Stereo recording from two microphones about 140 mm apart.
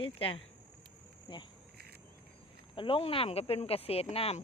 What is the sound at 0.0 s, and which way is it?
Speech, 40° left (ahead or behind).